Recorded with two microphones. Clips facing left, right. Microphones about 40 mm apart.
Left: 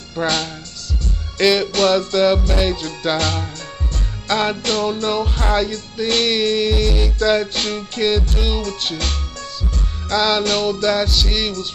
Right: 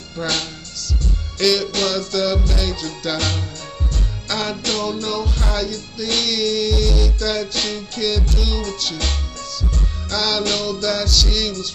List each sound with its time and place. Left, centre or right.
0.2 s music: left
10.1 s music: left